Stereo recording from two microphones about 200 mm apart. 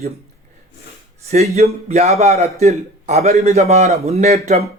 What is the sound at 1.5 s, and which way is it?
A man's voice, 35° right (ahead or behind).